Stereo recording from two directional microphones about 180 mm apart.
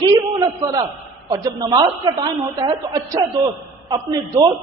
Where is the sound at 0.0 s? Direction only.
20° right (ahead or behind).